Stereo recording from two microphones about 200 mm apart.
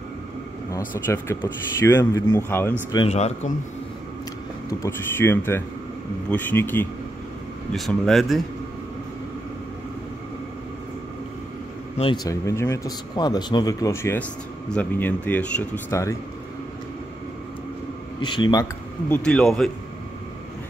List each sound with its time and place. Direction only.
0.7 s speech: 15° left (ahead or behind)
3.1 s speech: 35° left (ahead or behind)
4.6 s speech: 10° left (ahead or behind)
12.0 s speech: 20° left (ahead or behind)
18.2 s speech: 20° left (ahead or behind); by 19.7 s centre (ahead or behind)